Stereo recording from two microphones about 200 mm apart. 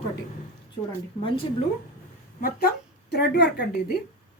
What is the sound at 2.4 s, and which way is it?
Speech, 45° left (ahead or behind).